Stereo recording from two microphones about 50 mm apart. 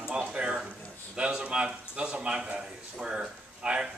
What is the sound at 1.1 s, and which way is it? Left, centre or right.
A man's voice, right.